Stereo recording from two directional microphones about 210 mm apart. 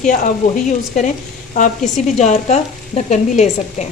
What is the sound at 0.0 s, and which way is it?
Frying, 40° left (ahead or behind).